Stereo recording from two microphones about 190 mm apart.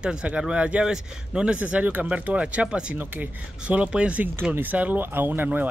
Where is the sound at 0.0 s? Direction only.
5° right (ahead or behind).